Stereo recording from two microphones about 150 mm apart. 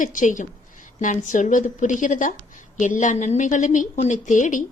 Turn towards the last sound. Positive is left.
turn(degrees=55)  # may be behind; listen again after turning